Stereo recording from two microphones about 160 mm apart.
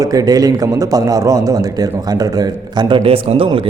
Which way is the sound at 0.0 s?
20° right (ahead or behind).